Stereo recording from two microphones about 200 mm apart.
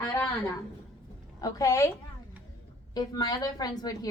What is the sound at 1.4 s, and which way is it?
Speech, 15° left (ahead or behind).